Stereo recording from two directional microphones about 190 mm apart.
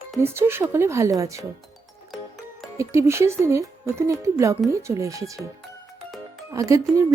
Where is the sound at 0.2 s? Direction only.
10° right (ahead or behind).